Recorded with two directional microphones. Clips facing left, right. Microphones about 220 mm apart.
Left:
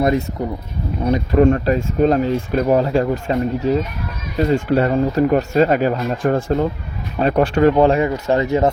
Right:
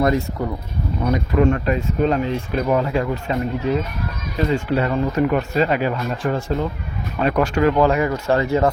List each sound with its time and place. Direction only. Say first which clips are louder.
0.0 s speech: left 1 dB; 20° left (ahead or behind)
1.0 s speech: left 4 dB; 35° left (ahead or behind); by 6.7 s 55° left (ahead or behind)
7.2 s speech: left 3 dB; 35° left (ahead or behind)